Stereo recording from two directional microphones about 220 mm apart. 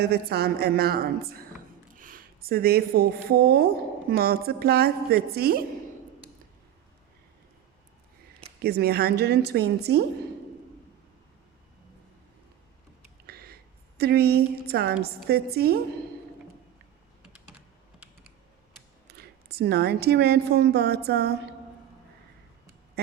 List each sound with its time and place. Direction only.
0.0 s speech: 45° right (ahead or behind)
8.6 s speech: 45° right (ahead or behind)
13.2 s a sound: 45° right (ahead or behind)
14.0 s speech: 45° right (ahead or behind)
19.1 s a woman's voice: 45° right (ahead or behind)